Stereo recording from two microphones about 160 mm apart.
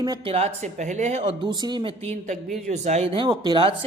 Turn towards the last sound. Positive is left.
turn(degrees=-30)  # may be behind; listen again after turning